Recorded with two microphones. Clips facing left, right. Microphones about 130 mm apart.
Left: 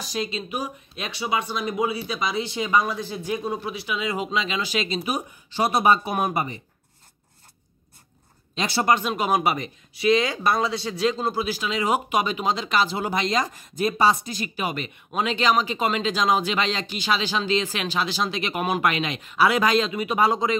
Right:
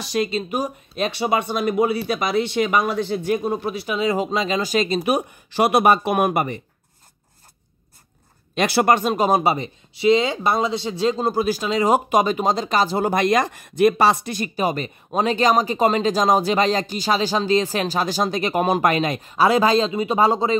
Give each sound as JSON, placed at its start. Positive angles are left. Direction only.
{"t": 0.0, "sound": "speech", "side_deg": -55}
{"t": 3.4, "sound": "speech", "side_deg": -45}
{"t": 8.5, "sound": "speech", "side_deg": -90}
{"t": 8.8, "sound": "speech", "side_deg": -45}
{"t": 11.1, "sound": "speech", "side_deg": -40}
{"t": 14.4, "sound": "speech", "side_deg": -40}